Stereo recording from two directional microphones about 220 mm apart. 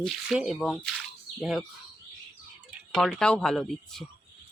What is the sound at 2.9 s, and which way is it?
Speech, 5° left (ahead or behind).